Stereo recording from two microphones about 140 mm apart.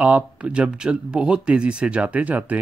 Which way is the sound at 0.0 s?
10° right (ahead or behind).